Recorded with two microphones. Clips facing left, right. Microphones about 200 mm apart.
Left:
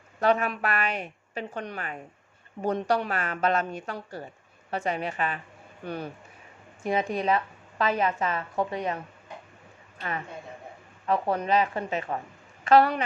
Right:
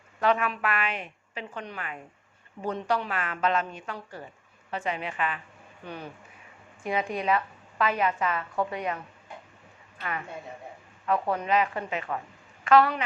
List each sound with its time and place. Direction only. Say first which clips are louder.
0.2 s a woman's voice: left 1 dB; 40° left (ahead or behind)
10.0 s a woman's voice: left 1 dB; 35° left (ahead or behind)